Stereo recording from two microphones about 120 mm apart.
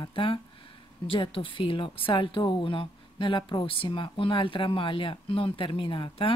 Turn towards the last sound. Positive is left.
turn(degrees=45)  # may be behind; listen again after turning